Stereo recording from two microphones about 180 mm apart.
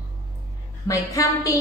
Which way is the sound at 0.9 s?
15° left (ahead or behind).